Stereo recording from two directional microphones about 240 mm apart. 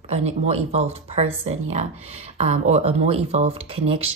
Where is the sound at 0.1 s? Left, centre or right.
Right.